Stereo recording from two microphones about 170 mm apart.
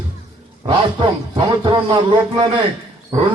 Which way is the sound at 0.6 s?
30° right (ahead or behind).